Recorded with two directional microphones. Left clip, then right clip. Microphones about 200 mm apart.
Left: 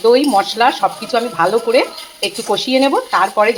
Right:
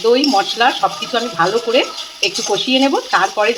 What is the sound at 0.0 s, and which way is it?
Speech, 20° left (ahead or behind).